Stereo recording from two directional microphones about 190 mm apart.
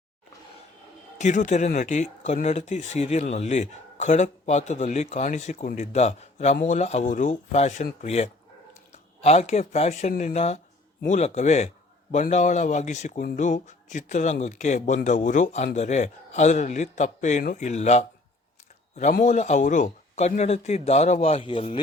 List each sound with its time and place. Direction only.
1.2 s speech: 40° left (ahead or behind)
19.1 s speech: 40° left (ahead or behind)